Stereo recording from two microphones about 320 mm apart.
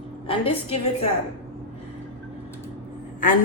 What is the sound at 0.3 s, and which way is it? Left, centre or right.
Speech, centre.